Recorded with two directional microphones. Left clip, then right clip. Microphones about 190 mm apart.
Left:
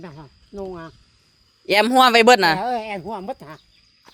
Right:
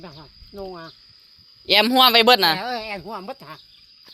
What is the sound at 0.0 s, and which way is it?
Speech, 55° left (ahead or behind).